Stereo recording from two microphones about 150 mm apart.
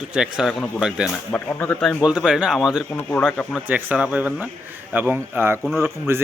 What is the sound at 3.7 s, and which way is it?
Speech, 10° right (ahead or behind).